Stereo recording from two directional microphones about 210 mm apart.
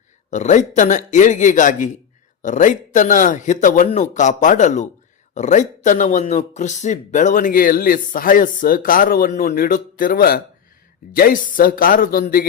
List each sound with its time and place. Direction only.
0.3 s speech: 35° left (ahead or behind)